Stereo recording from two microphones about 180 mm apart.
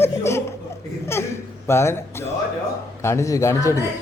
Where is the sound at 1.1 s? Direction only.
15° left (ahead or behind).